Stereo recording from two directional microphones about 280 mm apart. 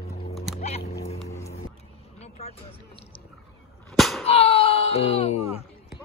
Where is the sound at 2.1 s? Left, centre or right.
Left.